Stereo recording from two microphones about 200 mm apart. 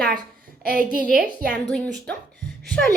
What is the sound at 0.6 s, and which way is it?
Speech, 45° right (ahead or behind).